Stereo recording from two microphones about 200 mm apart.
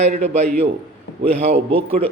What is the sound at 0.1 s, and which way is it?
Speech, 45° right (ahead or behind).